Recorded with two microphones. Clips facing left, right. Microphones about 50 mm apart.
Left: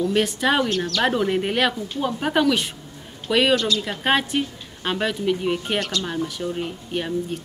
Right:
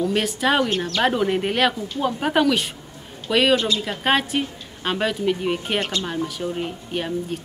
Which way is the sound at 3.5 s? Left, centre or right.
Right.